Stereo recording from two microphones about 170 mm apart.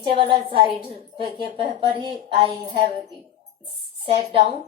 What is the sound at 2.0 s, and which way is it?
Speech, 30° right (ahead or behind).